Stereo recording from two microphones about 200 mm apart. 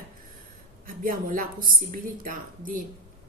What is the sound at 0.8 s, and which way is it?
A woman's voice, 45° right (ahead or behind).